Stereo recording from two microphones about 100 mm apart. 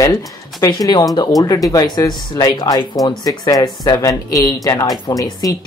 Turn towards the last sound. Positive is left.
turn(degrees=40)  # may be behind; listen again after turning